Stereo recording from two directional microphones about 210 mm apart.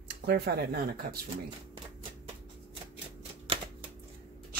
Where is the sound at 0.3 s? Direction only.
50° right (ahead or behind).